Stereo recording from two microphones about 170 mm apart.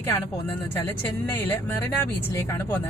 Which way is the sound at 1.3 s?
10° left (ahead or behind).